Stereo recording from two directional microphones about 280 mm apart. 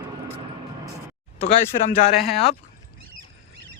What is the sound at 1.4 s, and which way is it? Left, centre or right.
Speech, left.